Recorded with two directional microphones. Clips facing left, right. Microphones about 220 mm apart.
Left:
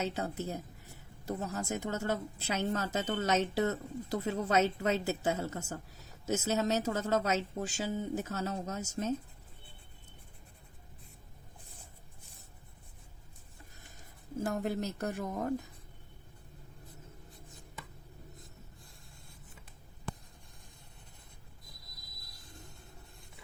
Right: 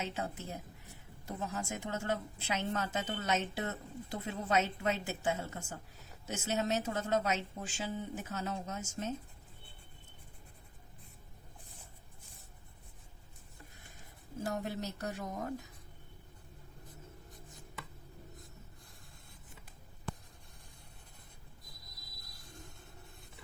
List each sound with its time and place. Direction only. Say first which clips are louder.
0.0 s speech: left 4 dB; 40° left (ahead or behind)
14.4 s speech: left 4 dB; 50° left (ahead or behind)